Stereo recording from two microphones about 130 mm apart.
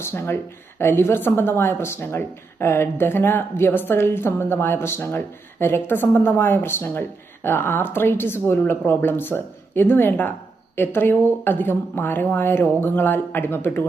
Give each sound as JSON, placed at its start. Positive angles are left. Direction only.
{"t": 0.0, "sound": "speech", "side_deg": 20}